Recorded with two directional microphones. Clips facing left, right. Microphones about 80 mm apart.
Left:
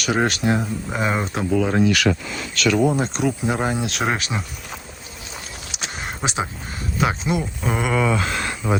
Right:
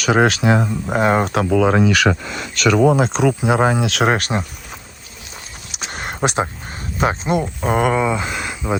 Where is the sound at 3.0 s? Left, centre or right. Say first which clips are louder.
Right 5 dB; right.